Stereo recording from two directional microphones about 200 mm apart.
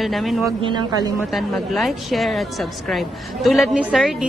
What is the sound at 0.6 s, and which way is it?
Speech, 25° right (ahead or behind).